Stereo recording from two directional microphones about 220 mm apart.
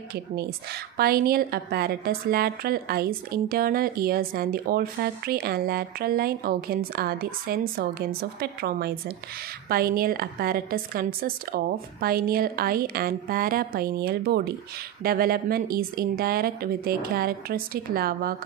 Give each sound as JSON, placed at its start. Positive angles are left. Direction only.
{"t": 0.9, "sound": "a woman's voice", "side_deg": -45}